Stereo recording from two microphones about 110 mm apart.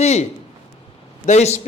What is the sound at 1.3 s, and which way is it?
Speech, 85° left.